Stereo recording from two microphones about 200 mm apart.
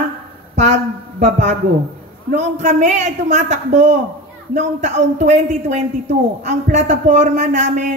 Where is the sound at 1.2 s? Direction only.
35° right (ahead or behind).